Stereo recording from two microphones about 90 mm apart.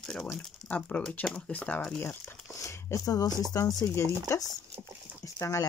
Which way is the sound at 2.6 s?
35° left (ahead or behind).